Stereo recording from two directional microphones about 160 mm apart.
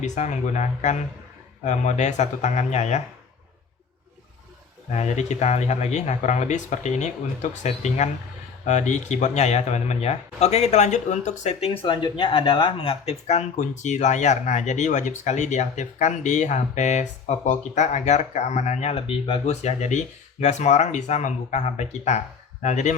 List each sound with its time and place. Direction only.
0.0 s speech: 50° left (ahead or behind)
4.9 s speech: 45° left (ahead or behind)